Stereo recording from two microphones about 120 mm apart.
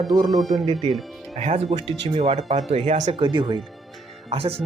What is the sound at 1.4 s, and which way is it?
Speech, 65° right (ahead or behind).